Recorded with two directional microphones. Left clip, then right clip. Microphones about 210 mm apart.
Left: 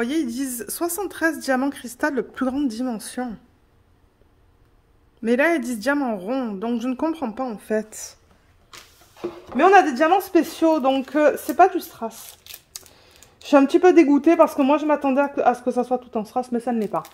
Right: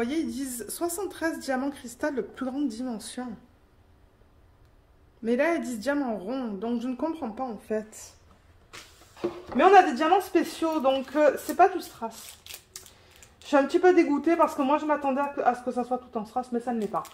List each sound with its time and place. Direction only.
0.0 s speech: 40° left (ahead or behind)
5.2 s speech: 40° left (ahead or behind)
9.6 s speech: 45° left (ahead or behind)
13.4 s speech: 55° left (ahead or behind)